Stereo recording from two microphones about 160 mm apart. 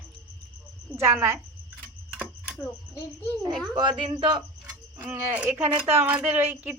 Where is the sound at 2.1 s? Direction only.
5° right (ahead or behind).